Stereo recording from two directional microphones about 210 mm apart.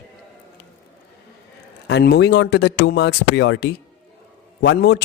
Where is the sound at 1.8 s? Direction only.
50° left (ahead or behind).